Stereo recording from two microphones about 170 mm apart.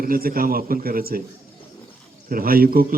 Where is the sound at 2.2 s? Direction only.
60° right (ahead or behind).